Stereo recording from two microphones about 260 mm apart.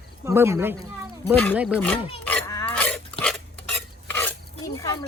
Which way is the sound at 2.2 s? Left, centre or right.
Centre.